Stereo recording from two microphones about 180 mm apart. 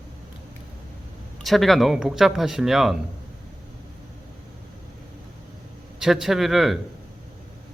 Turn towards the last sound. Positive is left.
turn(degrees=0)  # may be behind; listen again after turning